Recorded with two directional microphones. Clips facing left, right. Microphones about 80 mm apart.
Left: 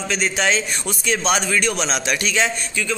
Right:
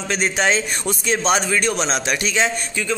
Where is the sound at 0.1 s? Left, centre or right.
Right.